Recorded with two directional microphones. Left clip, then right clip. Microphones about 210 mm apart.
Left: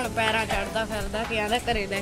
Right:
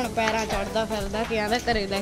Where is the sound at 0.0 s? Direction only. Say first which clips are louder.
Even; 40° right (ahead or behind).